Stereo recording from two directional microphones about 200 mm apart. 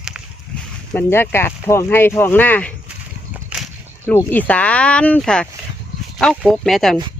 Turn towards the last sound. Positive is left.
turn(degrees=0)  # may be behind; listen again after turning